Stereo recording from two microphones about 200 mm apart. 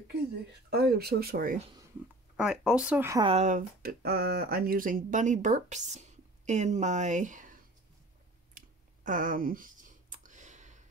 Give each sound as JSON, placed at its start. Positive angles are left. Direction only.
{"t": 0.7, "sound": "speech", "side_deg": -50}
{"t": 2.3, "sound": "speech", "side_deg": -5}
{"t": 3.2, "sound": "speech", "side_deg": -30}
{"t": 8.5, "sound": "computer keyboard", "side_deg": -40}